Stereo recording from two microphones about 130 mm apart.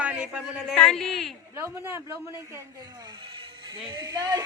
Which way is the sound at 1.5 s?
15° right (ahead or behind).